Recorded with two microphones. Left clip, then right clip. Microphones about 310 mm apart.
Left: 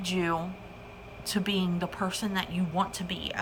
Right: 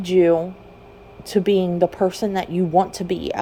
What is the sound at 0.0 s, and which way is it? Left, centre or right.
A woman's voice, centre.